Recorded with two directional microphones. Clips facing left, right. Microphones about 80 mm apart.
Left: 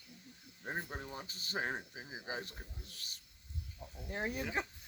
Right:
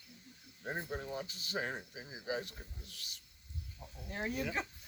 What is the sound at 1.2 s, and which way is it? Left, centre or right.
Speech, left.